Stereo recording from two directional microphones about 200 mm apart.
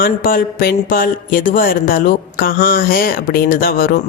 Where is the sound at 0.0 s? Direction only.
45° left (ahead or behind).